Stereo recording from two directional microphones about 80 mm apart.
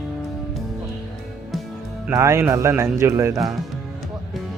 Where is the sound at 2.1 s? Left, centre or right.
Right.